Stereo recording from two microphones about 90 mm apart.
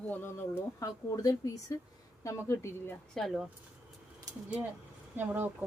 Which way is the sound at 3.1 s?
Centre (ahead or behind).